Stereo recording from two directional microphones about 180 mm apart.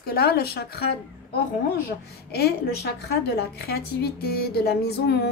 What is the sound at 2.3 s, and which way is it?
A woman's voice, 65° left (ahead or behind).